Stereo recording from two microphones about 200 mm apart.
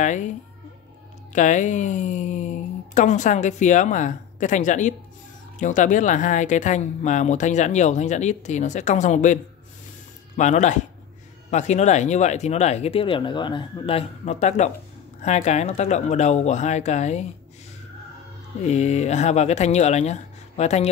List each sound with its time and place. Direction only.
0.0 s speech: 40° left (ahead or behind)
1.3 s speech: 40° left (ahead or behind)
18.6 s speech: 35° left (ahead or behind)